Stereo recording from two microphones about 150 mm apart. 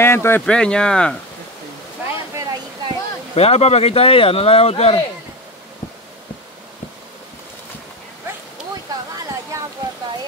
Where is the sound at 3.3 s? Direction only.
45° left (ahead or behind).